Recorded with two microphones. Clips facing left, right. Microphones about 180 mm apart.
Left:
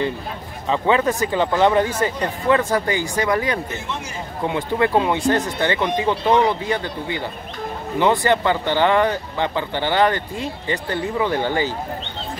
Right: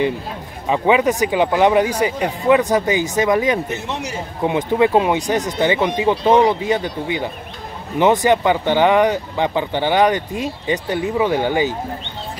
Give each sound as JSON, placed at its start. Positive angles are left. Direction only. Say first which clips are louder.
{"t": 0.7, "sound": "speech", "louder": "right 3 dB", "side_deg": -15}